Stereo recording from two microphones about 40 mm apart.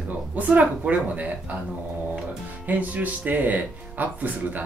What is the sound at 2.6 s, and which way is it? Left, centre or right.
Speech, right.